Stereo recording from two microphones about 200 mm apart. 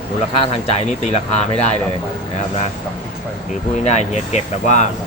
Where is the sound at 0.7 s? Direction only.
35° left (ahead or behind).